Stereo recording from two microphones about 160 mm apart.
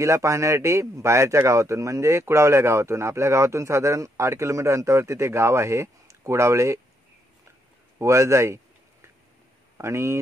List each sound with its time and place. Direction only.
0.0 s a man's voice: 20° right (ahead or behind)
8.0 s a man's voice: 20° right (ahead or behind)
9.8 s speech: 20° right (ahead or behind)